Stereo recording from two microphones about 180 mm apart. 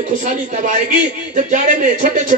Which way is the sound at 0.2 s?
45° right (ahead or behind).